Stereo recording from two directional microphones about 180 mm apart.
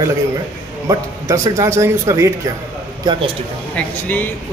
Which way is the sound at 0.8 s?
15° right (ahead or behind).